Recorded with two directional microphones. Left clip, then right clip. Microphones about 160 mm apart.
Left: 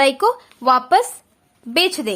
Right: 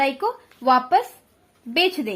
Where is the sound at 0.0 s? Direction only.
35° left (ahead or behind).